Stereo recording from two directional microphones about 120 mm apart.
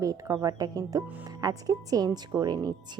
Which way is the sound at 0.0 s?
30° right (ahead or behind).